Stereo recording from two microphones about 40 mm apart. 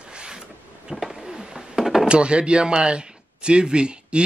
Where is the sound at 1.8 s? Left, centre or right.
Centre.